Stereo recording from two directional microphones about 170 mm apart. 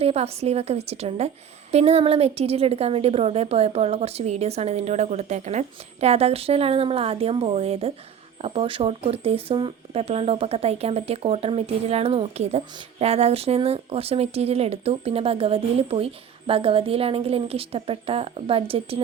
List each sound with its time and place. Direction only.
0.0 s speech: 35° right (ahead or behind)